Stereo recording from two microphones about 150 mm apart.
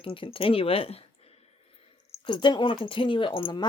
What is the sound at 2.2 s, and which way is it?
A man's voice, 30° left (ahead or behind).